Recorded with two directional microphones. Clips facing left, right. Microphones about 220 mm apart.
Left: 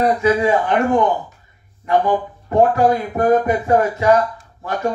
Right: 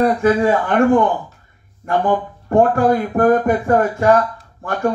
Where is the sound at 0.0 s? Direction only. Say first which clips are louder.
Right 1 dB; 50° right (ahead or behind).